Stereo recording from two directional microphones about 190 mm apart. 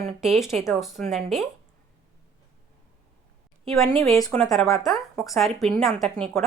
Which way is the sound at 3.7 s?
Centre (ahead or behind).